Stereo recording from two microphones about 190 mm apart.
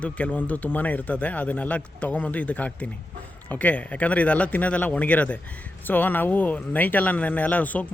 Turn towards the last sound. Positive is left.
turn(degrees=10)  # may be behind; listen again after turning